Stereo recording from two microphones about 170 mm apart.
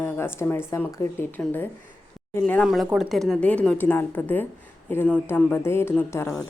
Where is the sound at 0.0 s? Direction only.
15° left (ahead or behind).